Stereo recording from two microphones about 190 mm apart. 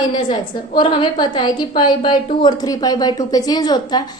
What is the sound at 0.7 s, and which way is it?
A woman's voice, 25° left (ahead or behind).